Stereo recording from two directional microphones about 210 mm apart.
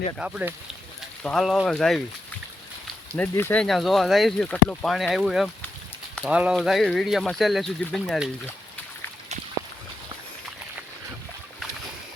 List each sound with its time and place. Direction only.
0.2 s speech: 5° right (ahead or behind)
3.2 s speech: 10° left (ahead or behind)